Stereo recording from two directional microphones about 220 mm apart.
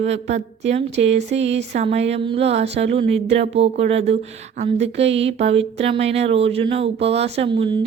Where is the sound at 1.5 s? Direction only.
30° right (ahead or behind).